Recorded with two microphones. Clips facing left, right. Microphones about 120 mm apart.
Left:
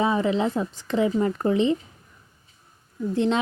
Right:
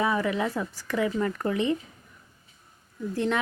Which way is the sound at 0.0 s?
25° left (ahead or behind).